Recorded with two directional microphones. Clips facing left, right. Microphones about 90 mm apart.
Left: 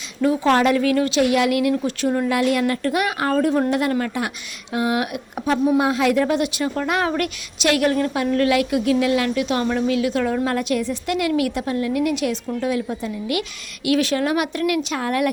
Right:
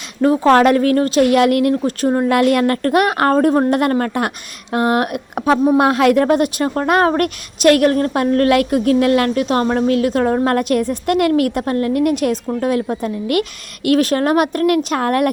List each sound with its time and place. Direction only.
0.2 s a woman's voice: 45° right (ahead or behind)
2.3 s a woman's voice: 55° right (ahead or behind)
3.3 s a woman's voice: 40° right (ahead or behind)